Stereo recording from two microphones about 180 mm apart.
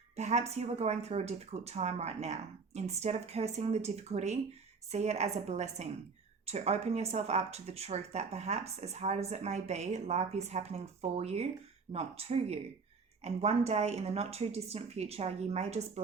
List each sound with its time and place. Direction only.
0.2 s speech: 40° right (ahead or behind)